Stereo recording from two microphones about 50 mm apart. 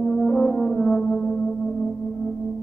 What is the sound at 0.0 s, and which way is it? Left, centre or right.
Brass instrument, left.